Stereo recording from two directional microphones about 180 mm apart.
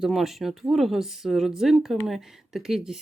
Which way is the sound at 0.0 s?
Centre (ahead or behind).